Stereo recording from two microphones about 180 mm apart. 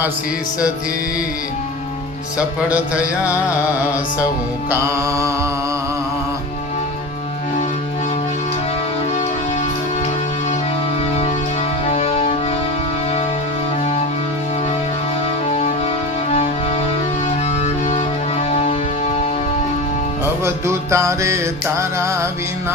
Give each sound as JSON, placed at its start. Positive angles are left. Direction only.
{"t": 2.6, "sound": "music", "side_deg": -10}
{"t": 4.7, "sound": "music", "side_deg": -15}
{"t": 11.1, "sound": "music", "side_deg": 40}
{"t": 15.4, "sound": "music", "side_deg": 35}
{"t": 20.2, "sound": "music", "side_deg": -15}